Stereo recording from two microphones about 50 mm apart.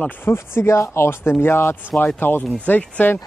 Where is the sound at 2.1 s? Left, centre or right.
Left.